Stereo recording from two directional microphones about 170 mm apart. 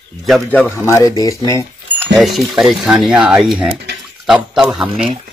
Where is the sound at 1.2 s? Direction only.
20° left (ahead or behind).